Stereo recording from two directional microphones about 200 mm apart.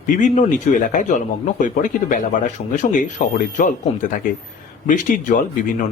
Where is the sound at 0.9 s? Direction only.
40° left (ahead or behind).